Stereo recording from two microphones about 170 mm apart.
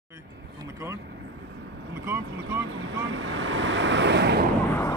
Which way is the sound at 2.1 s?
85° right.